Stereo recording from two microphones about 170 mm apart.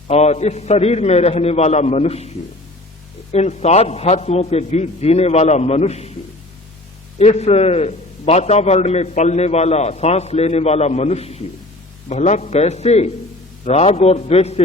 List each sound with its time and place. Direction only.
0.1 s a man's voice: 40° left (ahead or behind)
3.3 s a man's voice: 40° left (ahead or behind)
7.2 s a man's voice: 40° left (ahead or behind)